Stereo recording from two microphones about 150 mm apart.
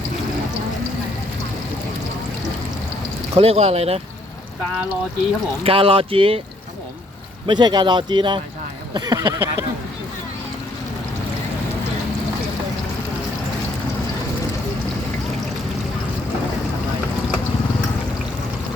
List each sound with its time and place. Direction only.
3.3 s speech: 40° right (ahead or behind)
5.6 s speech: 35° right (ahead or behind)
7.4 s speech: 30° right (ahead or behind)
8.9 s a sound: 25° right (ahead or behind)